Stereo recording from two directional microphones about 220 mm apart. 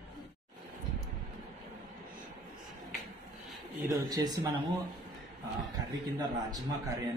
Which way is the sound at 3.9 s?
15° right (ahead or behind).